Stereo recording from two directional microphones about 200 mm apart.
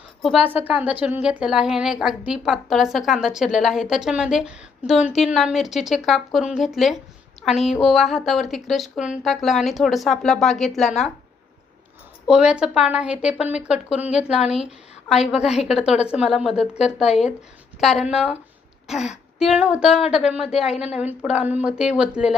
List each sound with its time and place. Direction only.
0.2 s speech: centre (ahead or behind)
12.3 s speech: 5° right (ahead or behind)
17.7 s speech: centre (ahead or behind)
20.7 s a woman's voice: 30° left (ahead or behind)
21.1 s speech: 5° right (ahead or behind)